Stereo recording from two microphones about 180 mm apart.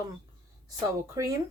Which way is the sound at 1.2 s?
20° right (ahead or behind).